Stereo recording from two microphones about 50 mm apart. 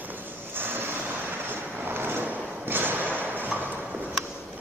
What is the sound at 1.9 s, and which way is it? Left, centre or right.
Sliding door, right.